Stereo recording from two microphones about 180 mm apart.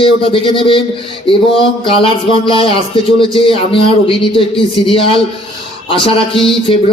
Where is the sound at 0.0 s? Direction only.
30° left (ahead or behind).